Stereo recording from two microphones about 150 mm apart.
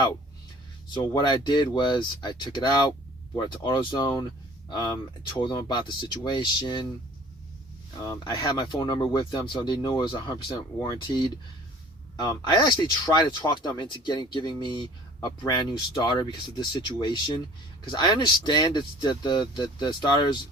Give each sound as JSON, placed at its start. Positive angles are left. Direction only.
{"t": 0.9, "sound": "speech", "side_deg": 30}
{"t": 5.3, "sound": "speech", "side_deg": 30}
{"t": 8.0, "sound": "speech", "side_deg": 25}